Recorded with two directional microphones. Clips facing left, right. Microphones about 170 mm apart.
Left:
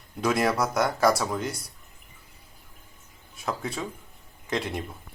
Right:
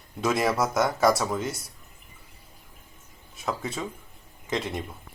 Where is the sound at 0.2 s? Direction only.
Centre (ahead or behind).